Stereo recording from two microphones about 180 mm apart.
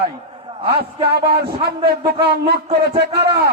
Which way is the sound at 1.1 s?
60° right (ahead or behind).